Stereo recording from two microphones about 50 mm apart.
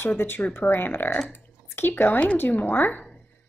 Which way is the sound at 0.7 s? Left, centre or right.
Left.